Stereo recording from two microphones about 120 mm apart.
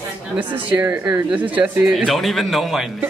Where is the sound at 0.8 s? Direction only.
15° right (ahead or behind).